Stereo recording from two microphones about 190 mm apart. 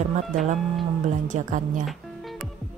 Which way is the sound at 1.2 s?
40° right (ahead or behind).